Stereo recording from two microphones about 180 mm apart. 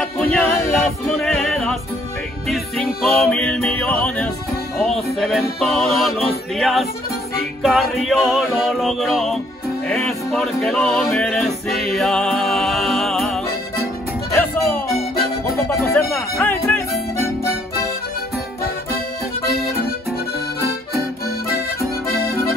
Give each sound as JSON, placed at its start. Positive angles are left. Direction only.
{"t": 0.0, "sound": "music", "side_deg": 5}
{"t": 14.3, "sound": "music", "side_deg": 15}
{"t": 22.0, "sound": "accordion", "side_deg": 55}